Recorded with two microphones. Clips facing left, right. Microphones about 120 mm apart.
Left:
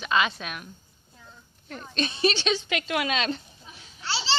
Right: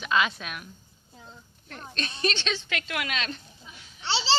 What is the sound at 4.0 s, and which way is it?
Babbling, 25° right (ahead or behind).